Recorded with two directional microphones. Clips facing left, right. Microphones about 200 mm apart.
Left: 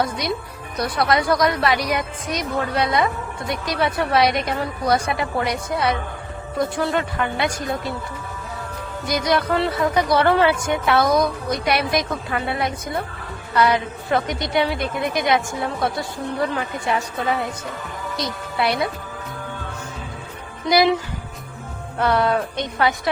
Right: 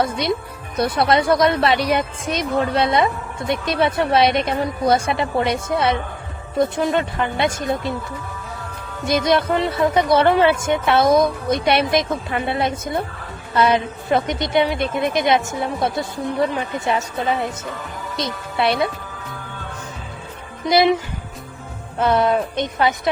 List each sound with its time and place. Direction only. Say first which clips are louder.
0.0 s a woman's voice: right 3 dB; 25° right (ahead or behind)
9.0 s a woman's voice: right 3 dB; 25° right (ahead or behind)
18.5 s a woman's voice: right 3 dB; 25° right (ahead or behind)
20.7 s a woman's voice: right 1 dB; 25° right (ahead or behind)
21.9 s a woman's voice: right 2 dB; 20° right (ahead or behind)